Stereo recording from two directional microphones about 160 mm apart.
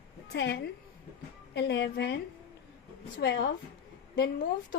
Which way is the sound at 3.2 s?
90° left.